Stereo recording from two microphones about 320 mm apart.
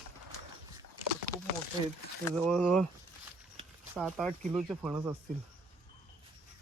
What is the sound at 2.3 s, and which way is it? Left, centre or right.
Speech, centre.